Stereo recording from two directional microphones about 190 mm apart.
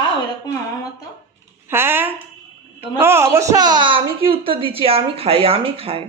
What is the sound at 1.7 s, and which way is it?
Speech, 10° right (ahead or behind).